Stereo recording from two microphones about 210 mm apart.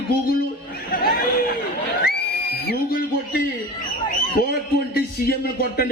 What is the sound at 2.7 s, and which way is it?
Speech, 45° left (ahead or behind).